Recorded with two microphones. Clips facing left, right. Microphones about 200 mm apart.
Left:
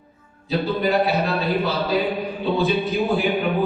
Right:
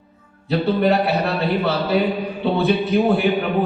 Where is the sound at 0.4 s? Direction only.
65° right (ahead or behind).